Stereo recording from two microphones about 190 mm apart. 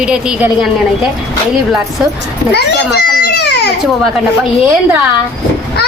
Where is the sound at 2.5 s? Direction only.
60° left (ahead or behind).